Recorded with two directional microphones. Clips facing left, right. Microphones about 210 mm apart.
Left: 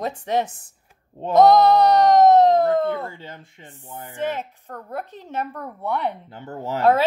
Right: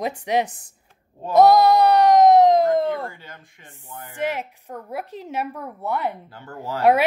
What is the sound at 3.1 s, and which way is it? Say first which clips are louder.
Speech: left 4 dB; 25° left (ahead or behind).